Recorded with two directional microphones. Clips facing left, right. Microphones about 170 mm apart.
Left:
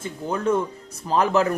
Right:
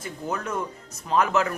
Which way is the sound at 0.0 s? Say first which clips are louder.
Left 6 dB; 30° left (ahead or behind).